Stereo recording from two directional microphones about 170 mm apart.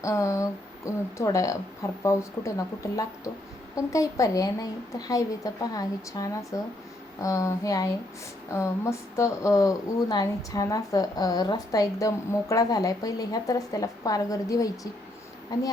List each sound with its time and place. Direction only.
0.0 s speech: 20° left (ahead or behind)